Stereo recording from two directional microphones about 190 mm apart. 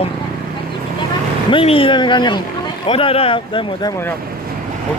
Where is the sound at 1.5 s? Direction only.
30° left (ahead or behind).